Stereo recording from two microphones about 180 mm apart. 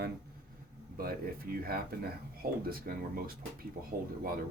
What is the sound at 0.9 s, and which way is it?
Speech, 55° right (ahead or behind).